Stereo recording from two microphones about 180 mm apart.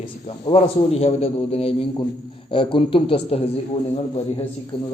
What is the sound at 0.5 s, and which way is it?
A man's voice, 35° left (ahead or behind).